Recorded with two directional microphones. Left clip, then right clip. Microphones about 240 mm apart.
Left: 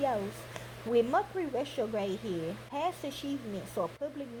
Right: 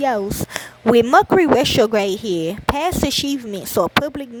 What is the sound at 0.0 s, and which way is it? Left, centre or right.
A woman's voice, right.